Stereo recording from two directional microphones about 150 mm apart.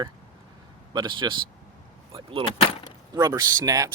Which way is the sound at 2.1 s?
35° right (ahead or behind).